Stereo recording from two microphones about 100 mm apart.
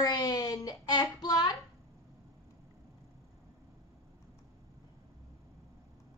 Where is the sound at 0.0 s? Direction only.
40° left (ahead or behind).